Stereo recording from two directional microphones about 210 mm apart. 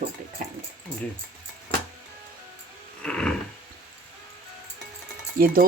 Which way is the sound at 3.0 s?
5° left (ahead or behind).